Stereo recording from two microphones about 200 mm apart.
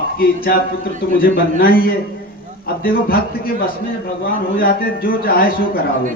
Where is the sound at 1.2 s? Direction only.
45° left (ahead or behind).